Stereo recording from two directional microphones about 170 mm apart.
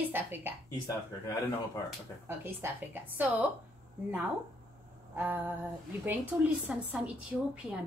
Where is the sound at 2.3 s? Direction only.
10° right (ahead or behind).